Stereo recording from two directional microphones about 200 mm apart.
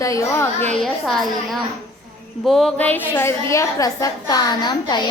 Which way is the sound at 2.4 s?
Centre (ahead or behind).